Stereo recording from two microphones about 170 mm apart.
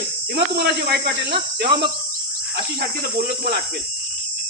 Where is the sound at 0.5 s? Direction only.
75° right (ahead or behind).